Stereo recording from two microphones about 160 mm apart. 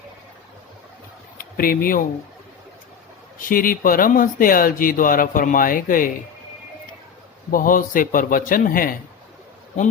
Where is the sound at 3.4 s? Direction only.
60° left (ahead or behind).